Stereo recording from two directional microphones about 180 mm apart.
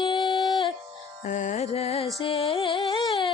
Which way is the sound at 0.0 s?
25° left (ahead or behind).